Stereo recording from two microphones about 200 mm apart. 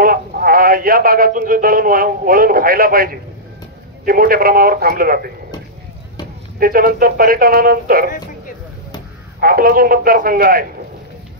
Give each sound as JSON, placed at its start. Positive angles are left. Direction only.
{"t": 0.0, "sound": "speech", "side_deg": -45}
{"t": 6.6, "sound": "speech", "side_deg": -45}
{"t": 9.4, "sound": "speech", "side_deg": -45}